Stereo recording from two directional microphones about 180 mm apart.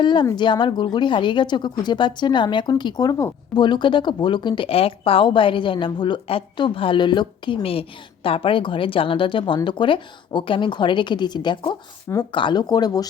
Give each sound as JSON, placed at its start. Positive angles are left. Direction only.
{"t": 0.0, "sound": "a woman's voice", "side_deg": 25}